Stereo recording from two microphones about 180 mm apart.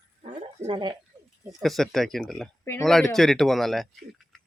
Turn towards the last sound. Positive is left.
turn(degrees=0)  # may be behind; listen again after turning